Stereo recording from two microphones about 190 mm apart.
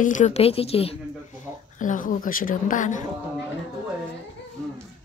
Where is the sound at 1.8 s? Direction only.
45° left (ahead or behind).